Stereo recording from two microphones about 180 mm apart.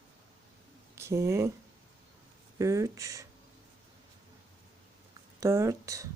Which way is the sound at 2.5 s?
15° right (ahead or behind).